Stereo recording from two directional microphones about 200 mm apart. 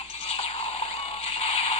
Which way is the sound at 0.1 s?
30° left (ahead or behind).